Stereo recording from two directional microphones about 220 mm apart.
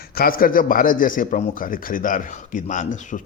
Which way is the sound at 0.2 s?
40° left (ahead or behind).